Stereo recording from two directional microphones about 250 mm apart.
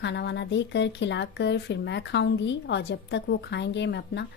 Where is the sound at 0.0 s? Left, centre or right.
Left.